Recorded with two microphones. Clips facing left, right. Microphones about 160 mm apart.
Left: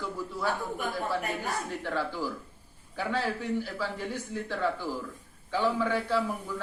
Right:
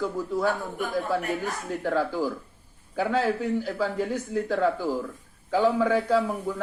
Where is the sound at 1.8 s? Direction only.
45° right (ahead or behind).